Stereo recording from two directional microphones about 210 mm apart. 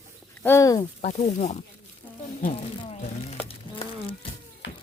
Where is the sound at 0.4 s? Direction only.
15° left (ahead or behind).